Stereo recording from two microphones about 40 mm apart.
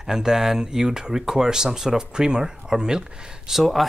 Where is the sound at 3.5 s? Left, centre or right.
Centre.